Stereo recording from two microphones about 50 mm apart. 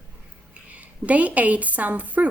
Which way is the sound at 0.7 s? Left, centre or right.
Right.